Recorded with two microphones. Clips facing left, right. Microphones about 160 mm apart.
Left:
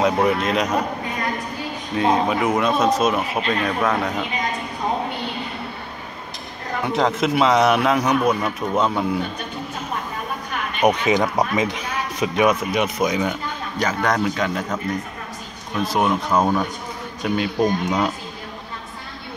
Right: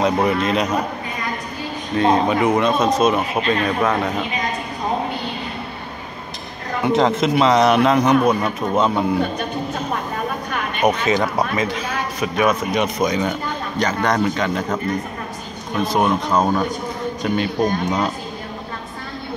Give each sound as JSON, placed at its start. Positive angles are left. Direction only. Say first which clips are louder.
{"t": 0.0, "sound": "a man's voice", "louder": "right 1 dB", "side_deg": 0}
{"t": 2.0, "sound": "a man's voice", "louder": "right 3 dB", "side_deg": 5}
{"t": 7.0, "sound": "a man's voice", "louder": "right 1 dB", "side_deg": 0}
{"t": 10.8, "sound": "speech", "louder": "even", "side_deg": 15}
{"t": 12.7, "sound": "a man's voice", "louder": "right 1 dB", "side_deg": 10}
{"t": 15.9, "sound": "a man's voice", "louder": "right 1 dB", "side_deg": 5}